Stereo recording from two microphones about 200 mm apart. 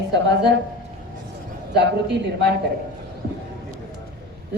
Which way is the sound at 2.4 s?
55° right (ahead or behind).